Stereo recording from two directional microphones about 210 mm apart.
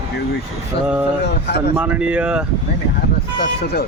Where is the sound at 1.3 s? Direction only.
50° left (ahead or behind).